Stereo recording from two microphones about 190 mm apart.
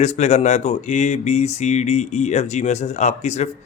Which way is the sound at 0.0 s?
35° left (ahead or behind).